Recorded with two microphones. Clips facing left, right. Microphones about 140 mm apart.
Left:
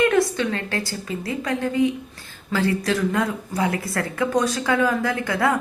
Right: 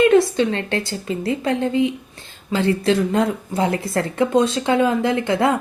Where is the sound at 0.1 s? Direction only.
25° right (ahead or behind).